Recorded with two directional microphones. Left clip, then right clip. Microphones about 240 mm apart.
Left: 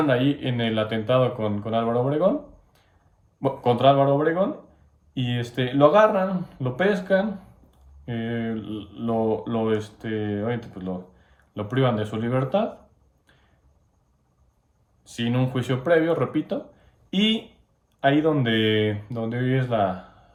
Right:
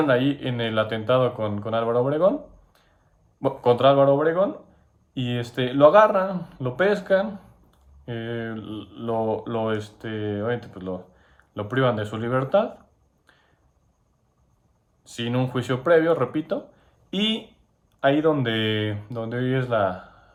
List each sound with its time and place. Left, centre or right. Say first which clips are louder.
0.1 s speech: right 1 dB; centre
3.4 s speech: right 1 dB; centre
13.2 s a sound: right 2 dB; centre
15.0 s speech: even; centre
16.5 s a sound: right 2 dB; centre
18.0 s speech: even; centre